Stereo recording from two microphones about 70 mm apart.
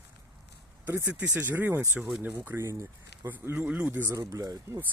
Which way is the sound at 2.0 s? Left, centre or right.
Centre.